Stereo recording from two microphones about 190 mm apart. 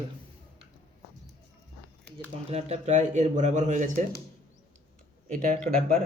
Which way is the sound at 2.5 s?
35° right (ahead or behind).